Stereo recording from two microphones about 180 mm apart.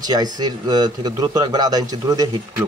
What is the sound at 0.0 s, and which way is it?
Speech, 20° right (ahead or behind).